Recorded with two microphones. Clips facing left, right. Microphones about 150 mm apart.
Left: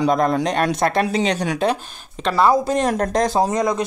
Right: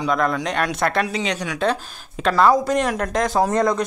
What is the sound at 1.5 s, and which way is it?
Speech, 10° left (ahead or behind).